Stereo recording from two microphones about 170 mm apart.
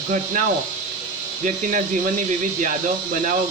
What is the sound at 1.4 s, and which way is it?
Speech, 50° right (ahead or behind).